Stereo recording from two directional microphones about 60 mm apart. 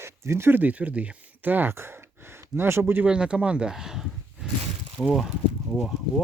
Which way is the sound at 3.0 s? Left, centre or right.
Centre.